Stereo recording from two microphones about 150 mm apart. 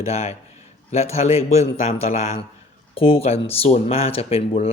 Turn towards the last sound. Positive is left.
turn(degrees=40)  # may be behind; listen again after turning